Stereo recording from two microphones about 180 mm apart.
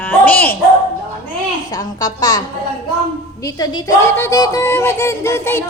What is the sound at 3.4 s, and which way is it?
Speech, 20° left (ahead or behind).